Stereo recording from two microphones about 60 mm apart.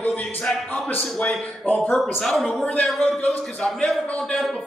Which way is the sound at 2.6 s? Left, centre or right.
Centre.